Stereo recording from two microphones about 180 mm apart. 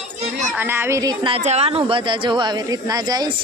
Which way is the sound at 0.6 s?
10° right (ahead or behind).